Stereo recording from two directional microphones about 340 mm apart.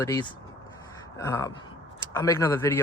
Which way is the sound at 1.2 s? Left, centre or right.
Centre.